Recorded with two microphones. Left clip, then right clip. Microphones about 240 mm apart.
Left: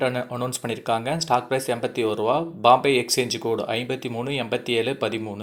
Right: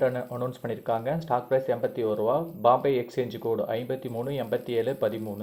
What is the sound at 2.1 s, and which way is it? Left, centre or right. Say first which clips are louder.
Speech: left 3 dB; left.